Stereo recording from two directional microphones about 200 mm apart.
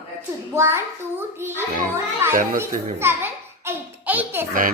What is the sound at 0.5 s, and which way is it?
A child's voice, 15° right (ahead or behind).